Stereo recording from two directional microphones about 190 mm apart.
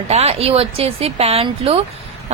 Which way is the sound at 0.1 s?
35° right (ahead or behind).